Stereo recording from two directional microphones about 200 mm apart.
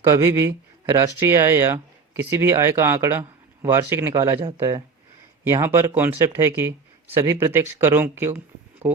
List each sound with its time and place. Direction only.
0.0 s speech: 15° right (ahead or behind)